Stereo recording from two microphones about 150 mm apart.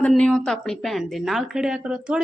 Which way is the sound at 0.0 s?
5° left (ahead or behind).